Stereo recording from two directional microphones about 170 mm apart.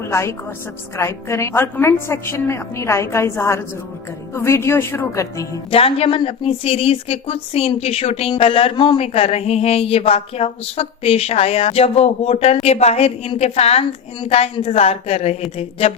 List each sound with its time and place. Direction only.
0.1 s a woman's voice: 15° left (ahead or behind)
5.7 s a woman's voice: 35° left (ahead or behind)